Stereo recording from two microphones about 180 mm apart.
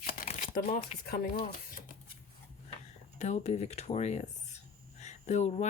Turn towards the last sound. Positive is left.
turn(degrees=40)  # may be behind; listen again after turning